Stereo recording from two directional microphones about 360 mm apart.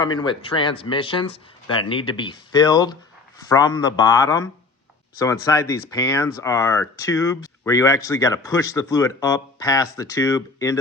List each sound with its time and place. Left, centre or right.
0.0 s speech: centre